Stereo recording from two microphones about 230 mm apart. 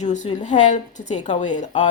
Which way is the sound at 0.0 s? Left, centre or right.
Left.